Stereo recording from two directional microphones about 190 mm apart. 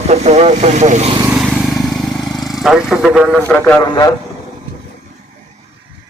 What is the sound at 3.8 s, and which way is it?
Speech, 20° left (ahead or behind).